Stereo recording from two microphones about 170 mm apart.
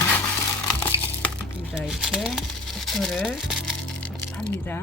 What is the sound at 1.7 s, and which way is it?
Speech, centre (ahead or behind).